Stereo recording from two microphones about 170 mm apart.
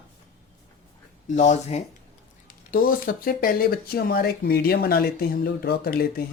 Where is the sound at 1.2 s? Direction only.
45° left (ahead or behind).